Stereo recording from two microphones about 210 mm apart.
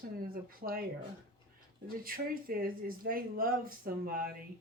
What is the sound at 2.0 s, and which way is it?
Speech, 45° right (ahead or behind).